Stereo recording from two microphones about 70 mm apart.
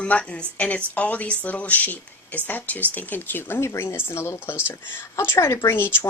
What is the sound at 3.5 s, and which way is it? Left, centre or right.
Speech, left.